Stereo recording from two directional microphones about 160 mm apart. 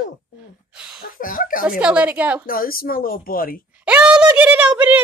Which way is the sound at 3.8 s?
10° right (ahead or behind).